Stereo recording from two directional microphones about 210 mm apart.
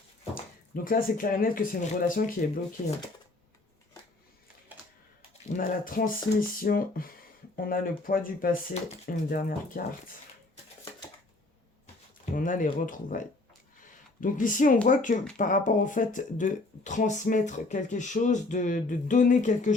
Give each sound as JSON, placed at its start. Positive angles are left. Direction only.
{"t": 0.3, "sound": "speech", "side_deg": 40}
{"t": 5.5, "sound": "speech", "side_deg": 40}
{"t": 12.3, "sound": "speech", "side_deg": 40}